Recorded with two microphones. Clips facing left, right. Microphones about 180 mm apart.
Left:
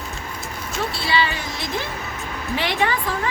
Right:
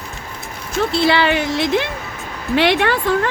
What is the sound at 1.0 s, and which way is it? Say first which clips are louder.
Speech: right 9 dB; 65° right (ahead or behind).